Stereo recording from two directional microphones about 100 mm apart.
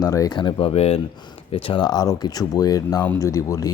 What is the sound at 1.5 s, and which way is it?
Speech, 60° left (ahead or behind).